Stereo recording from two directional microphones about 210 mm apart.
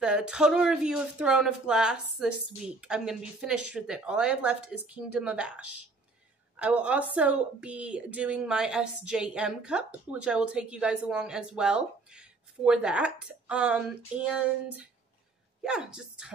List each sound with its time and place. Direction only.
0.0 s a woman's voice: 5° right (ahead or behind)